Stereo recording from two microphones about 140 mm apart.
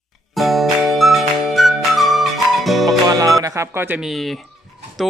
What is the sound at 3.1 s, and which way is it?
Music, 25° right (ahead or behind).